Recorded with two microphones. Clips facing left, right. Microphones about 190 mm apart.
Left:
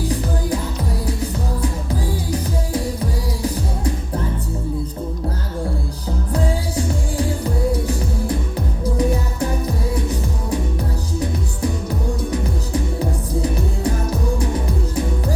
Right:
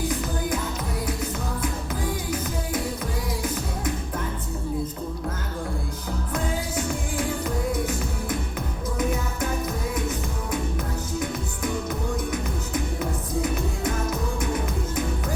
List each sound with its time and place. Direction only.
1.0 s music: 35° left (ahead or behind)
6.3 s music: 35° left (ahead or behind)
12.3 s music: 35° left (ahead or behind)